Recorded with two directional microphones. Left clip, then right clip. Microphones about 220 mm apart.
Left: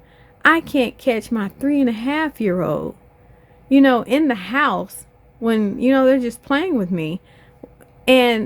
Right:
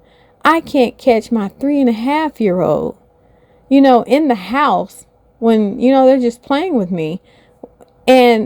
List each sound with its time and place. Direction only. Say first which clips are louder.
0.4 s a woman's voice: right 3 dB; 15° right (ahead or behind)